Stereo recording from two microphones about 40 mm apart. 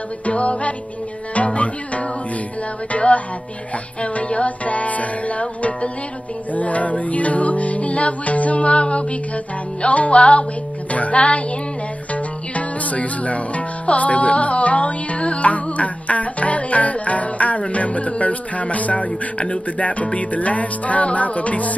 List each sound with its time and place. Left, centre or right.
0.3 s music: left